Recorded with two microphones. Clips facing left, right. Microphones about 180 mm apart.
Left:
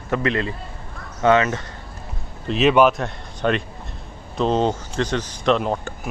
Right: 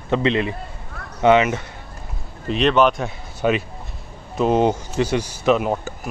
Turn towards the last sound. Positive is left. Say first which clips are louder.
# right 1 dB
turn(degrees=-5)  # may be behind; listen again after turning